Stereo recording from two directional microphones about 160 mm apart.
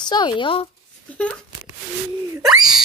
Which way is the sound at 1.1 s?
5° left (ahead or behind).